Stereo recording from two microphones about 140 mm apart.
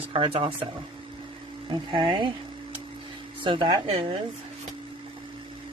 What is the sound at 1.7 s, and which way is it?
Speech, 35° right (ahead or behind).